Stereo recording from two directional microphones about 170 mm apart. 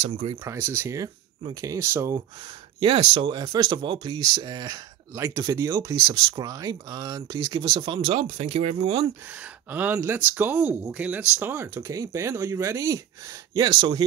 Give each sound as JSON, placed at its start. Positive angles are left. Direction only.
{"t": 0.0, "sound": "speech", "side_deg": -30}
{"t": 0.4, "sound": "speech", "side_deg": -15}
{"t": 2.8, "sound": "speech", "side_deg": -30}
{"t": 9.3, "sound": "speech", "side_deg": -10}